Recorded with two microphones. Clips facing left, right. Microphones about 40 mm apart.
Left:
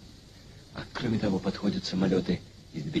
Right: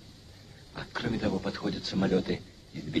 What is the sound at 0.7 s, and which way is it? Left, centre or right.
A man's voice, centre.